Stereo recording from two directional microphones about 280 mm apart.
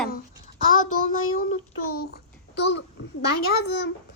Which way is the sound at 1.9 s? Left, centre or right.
Left.